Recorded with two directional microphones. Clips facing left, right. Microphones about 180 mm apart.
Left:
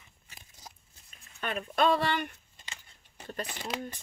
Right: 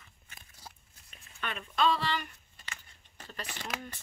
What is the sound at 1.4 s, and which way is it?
Speech, 40° left (ahead or behind).